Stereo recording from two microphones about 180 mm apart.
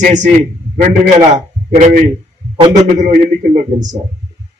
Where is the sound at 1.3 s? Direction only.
40° right (ahead or behind).